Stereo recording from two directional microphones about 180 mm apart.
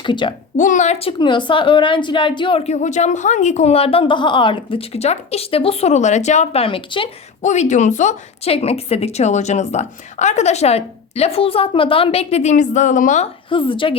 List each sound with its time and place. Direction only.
0.0 s a woman's voice: 25° left (ahead or behind)
0.5 s a woman's voice: 45° left (ahead or behind); by 7.1 s 30° left (ahead or behind)
7.4 s a woman's voice: 40° left (ahead or behind)